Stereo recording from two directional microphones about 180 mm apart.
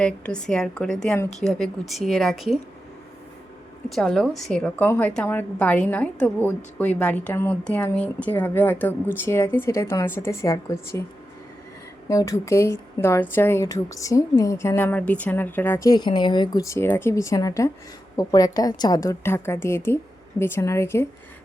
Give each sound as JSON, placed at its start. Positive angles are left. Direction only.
{"t": 0.0, "sound": "a woman's voice", "side_deg": 5}
{"t": 3.8, "sound": "a woman's voice", "side_deg": 0}
{"t": 12.0, "sound": "a woman's voice", "side_deg": 20}